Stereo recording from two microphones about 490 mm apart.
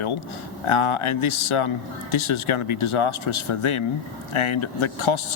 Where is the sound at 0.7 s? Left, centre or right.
Left.